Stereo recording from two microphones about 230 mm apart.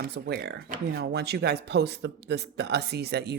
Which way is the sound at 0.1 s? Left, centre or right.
Right.